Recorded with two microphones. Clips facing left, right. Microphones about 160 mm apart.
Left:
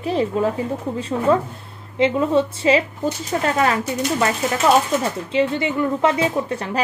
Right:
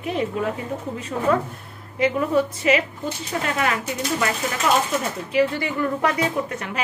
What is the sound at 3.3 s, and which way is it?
Speech, 40° left (ahead or behind).